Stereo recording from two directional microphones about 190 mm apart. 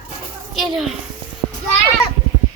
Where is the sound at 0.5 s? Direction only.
Centre (ahead or behind).